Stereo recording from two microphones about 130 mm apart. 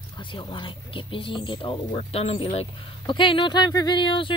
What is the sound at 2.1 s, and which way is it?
Speech, 50° left (ahead or behind).